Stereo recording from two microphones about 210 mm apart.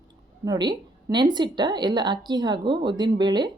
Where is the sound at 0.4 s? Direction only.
20° right (ahead or behind).